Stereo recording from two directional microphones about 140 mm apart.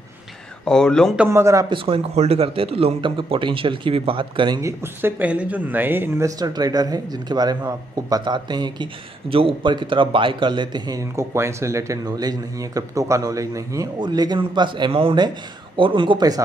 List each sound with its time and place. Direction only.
0.7 s speech: 5° left (ahead or behind)
1.1 s a man's voice: 10° right (ahead or behind)
1.4 s a man's voice: 25° right (ahead or behind)
1.7 s a man's voice: 45° right (ahead or behind)
4.6 s a man's voice: 20° right (ahead or behind)